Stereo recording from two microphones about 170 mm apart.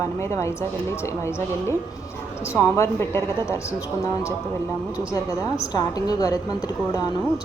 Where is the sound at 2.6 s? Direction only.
15° left (ahead or behind).